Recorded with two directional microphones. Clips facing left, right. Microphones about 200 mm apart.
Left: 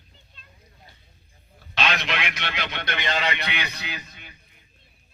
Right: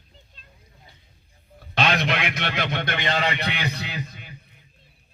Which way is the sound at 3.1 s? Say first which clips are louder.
Right 2 dB; 35° right (ahead or behind).